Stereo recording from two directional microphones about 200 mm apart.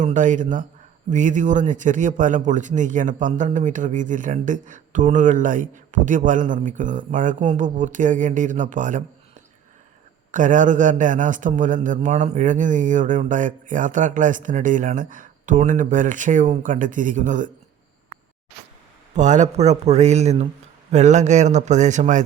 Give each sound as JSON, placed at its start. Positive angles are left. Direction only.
{"t": 0.0, "sound": "speech", "side_deg": -40}
{"t": 10.3, "sound": "speech", "side_deg": -40}
{"t": 19.1, "sound": "speech", "side_deg": -35}